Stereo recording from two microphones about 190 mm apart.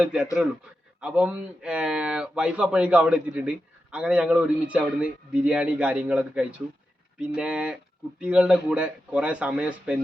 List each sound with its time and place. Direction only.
0.0 s a man's voice: 5° right (ahead or behind)